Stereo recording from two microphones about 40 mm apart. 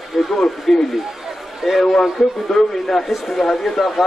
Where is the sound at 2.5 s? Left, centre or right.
Centre.